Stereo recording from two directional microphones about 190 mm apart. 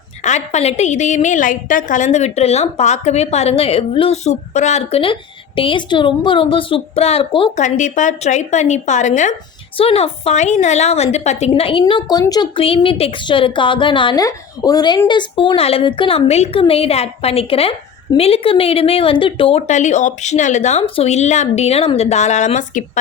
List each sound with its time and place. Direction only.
0.2 s a woman's voice: 35° left (ahead or behind)
7.6 s a woman's voice: 40° left (ahead or behind)